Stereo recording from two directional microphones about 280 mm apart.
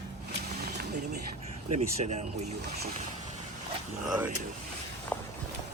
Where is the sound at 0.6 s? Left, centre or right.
Right.